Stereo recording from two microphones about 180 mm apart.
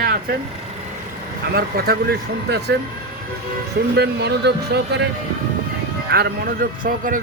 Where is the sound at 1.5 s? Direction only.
60° right (ahead or behind).